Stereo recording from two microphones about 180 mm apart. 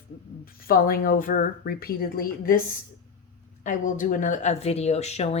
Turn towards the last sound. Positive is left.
turn(degrees=35)  # may be behind; listen again after turning